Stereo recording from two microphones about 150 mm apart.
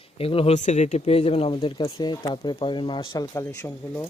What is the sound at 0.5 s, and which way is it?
Speech, 50° left (ahead or behind).